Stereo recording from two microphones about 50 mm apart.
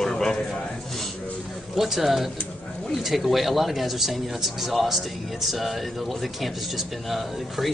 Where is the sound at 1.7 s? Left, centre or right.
Centre.